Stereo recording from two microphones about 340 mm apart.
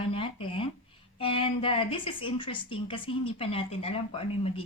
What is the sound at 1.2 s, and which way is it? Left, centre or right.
A woman's voice, centre.